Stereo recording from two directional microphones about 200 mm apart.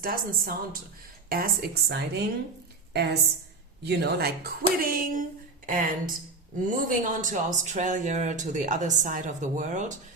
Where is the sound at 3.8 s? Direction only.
55° right (ahead or behind).